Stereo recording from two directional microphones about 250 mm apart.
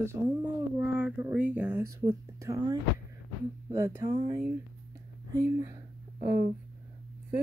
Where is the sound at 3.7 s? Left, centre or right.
Centre.